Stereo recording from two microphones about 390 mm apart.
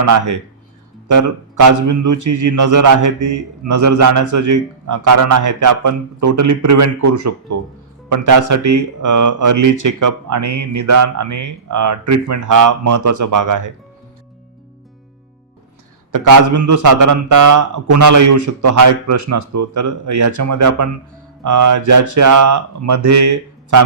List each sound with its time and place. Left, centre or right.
0.0 s a man's voice: right
16.1 s a man's voice: right